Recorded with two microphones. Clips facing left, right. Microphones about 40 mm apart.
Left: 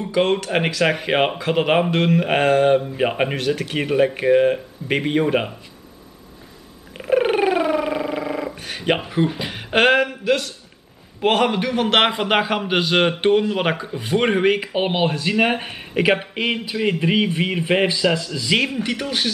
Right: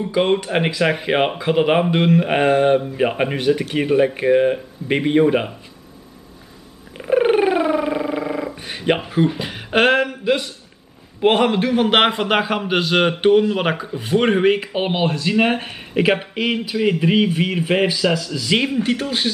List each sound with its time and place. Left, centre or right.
0.0 s a man's voice: centre
3.3 s speech: centre
3.6 s a man's voice: centre
7.0 s a sound: centre
8.5 s speech: centre
10.2 s a man's voice: centre
18.8 s speech: centre